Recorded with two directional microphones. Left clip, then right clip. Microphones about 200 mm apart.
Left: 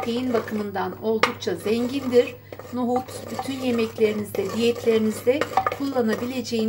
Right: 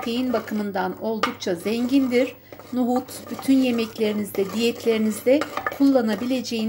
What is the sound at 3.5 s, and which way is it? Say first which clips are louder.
A woman's voice: right 5 dB; 40° right (ahead or behind).